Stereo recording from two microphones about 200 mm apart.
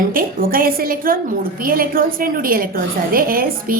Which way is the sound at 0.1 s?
45° right (ahead or behind).